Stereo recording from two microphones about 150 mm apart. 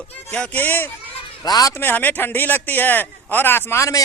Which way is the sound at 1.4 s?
25° left (ahead or behind).